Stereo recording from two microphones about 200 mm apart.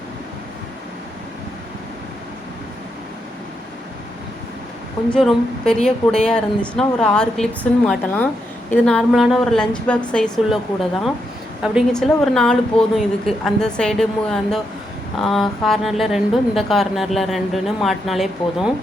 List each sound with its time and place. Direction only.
5.1 s speech: 5° left (ahead or behind)
11.6 s speech: centre (ahead or behind)